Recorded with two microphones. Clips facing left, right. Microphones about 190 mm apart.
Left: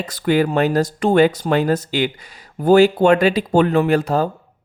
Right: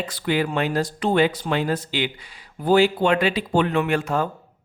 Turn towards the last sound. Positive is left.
turn(degrees=35)  # may be behind; listen again after turning